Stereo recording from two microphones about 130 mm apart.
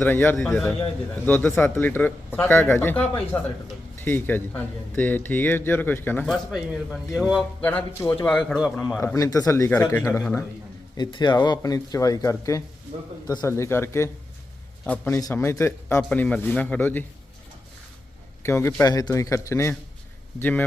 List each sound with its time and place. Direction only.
0.0 s speech: 15° left (ahead or behind)
6.2 s speech: centre (ahead or behind)
7.6 s speech: 10° left (ahead or behind)
8.3 s speech: centre (ahead or behind)
9.1 s a man's voice: 25° left (ahead or behind)
10.9 s a man's voice: 35° left (ahead or behind)
16.0 s speech: 10° left (ahead or behind)
18.4 s a man's voice: 20° left (ahead or behind)